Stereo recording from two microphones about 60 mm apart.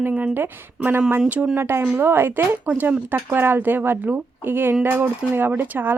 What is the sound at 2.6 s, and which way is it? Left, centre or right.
Speech, right.